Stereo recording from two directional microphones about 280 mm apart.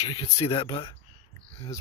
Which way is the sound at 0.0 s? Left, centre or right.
Centre.